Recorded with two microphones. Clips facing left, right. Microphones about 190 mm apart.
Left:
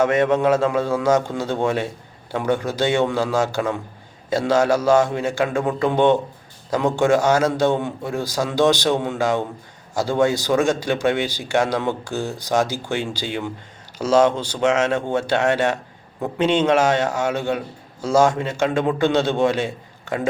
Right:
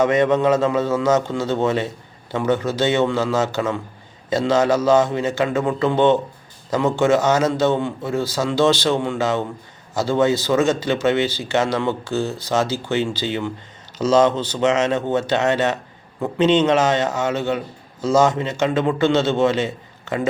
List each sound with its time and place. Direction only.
0.0 s speech: 10° left (ahead or behind)